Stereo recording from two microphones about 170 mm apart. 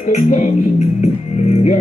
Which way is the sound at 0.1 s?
45° left (ahead or behind).